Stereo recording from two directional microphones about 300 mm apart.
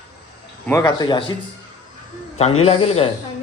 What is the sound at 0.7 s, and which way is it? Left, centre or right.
Speech, centre.